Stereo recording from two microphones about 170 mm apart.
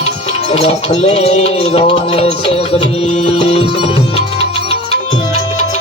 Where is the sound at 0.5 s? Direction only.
40° left (ahead or behind).